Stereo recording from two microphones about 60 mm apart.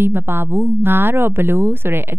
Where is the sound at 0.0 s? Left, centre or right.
Right.